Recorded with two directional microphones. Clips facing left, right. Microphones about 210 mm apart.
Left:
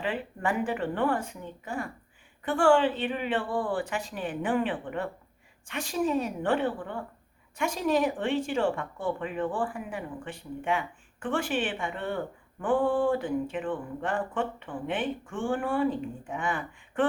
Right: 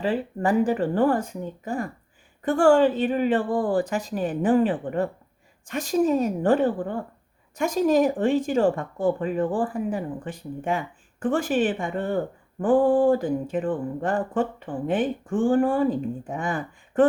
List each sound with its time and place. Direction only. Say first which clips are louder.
0.0 s speech: right 7 dB; 35° right (ahead or behind)